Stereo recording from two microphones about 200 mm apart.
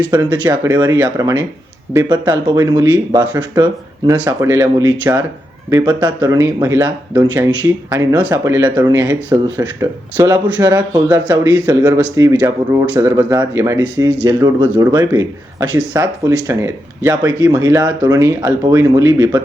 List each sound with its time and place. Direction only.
0.1 s speech: 20° right (ahead or behind)